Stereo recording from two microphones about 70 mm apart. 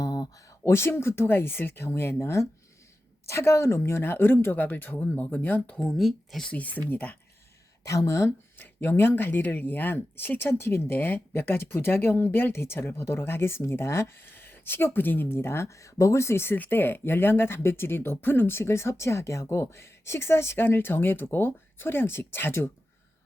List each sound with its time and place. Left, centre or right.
0.0 s a sound: left
0.6 s speech: left
5.8 s speech: centre
6.5 s speech: left
7.9 s speech: left
8.5 s speech: left